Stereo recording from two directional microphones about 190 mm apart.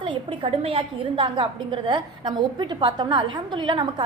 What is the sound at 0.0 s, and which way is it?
A woman's voice, 25° right (ahead or behind).